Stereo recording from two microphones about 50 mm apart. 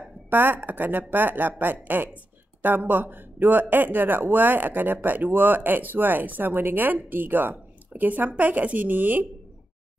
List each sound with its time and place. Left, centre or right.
0.3 s speech: right